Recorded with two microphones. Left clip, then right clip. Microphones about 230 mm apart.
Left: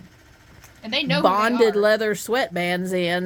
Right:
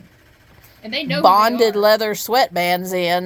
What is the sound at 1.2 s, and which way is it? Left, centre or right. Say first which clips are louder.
Speech: right 6 dB; centre.